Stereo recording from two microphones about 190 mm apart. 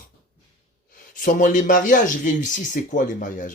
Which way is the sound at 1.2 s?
45° left (ahead or behind).